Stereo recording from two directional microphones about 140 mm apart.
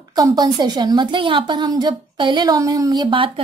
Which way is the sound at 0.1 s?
30° right (ahead or behind).